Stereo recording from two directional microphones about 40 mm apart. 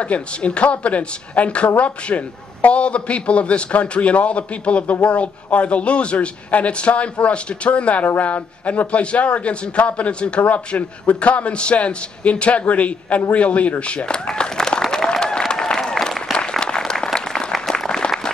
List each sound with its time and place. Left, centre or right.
0.0 s a man's voice: left
14.8 s applause: centre
16.3 s applause: left